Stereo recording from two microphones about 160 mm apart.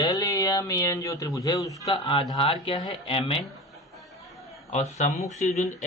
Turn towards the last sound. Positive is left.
turn(degrees=45)  # may be behind; listen again after turning